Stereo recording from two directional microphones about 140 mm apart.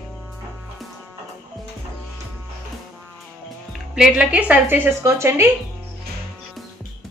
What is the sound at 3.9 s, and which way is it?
A woman's voice, 10° right (ahead or behind).